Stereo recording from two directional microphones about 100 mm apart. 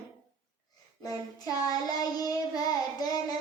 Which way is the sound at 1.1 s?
40° left (ahead or behind).